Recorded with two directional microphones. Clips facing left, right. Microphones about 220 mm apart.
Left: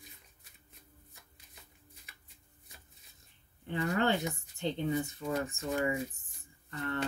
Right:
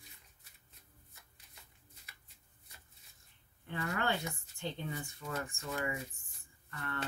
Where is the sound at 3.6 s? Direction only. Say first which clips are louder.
Left 6 dB; 25° left (ahead or behind).